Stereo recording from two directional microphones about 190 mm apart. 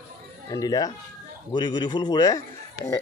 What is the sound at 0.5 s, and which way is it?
A man's voice, 20° left (ahead or behind).